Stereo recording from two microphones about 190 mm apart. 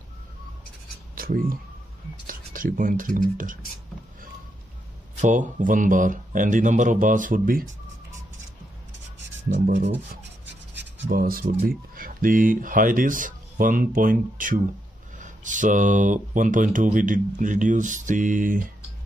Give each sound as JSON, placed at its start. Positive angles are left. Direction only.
{"t": 1.1, "sound": "speech", "side_deg": -50}
{"t": 5.2, "sound": "speech", "side_deg": -40}
{"t": 9.2, "sound": "speech", "side_deg": -70}
{"t": 10.8, "sound": "a sound", "side_deg": -50}
{"t": 11.9, "sound": "speech", "side_deg": -45}